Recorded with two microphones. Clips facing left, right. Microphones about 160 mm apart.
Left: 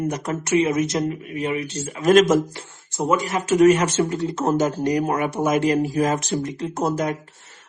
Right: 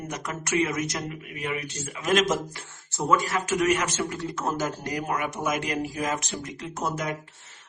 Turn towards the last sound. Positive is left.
turn(degrees=35)  # may be behind; listen again after turning